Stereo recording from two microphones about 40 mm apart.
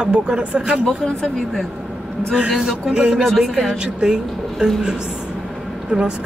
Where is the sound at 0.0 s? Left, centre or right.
Right.